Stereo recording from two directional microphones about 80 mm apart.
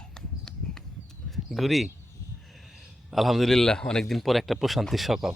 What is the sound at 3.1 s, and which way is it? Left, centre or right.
Speech, centre.